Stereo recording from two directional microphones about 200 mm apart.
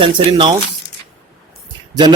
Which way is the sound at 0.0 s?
25° right (ahead or behind).